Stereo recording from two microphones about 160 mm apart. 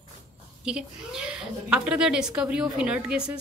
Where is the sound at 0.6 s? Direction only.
5° right (ahead or behind).